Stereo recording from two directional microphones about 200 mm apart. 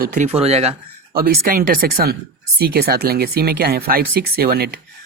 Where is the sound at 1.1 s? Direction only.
45° right (ahead or behind).